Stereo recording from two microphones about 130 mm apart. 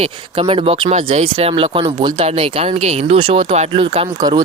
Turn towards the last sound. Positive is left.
turn(degrees=-45)  # may be behind; listen again after turning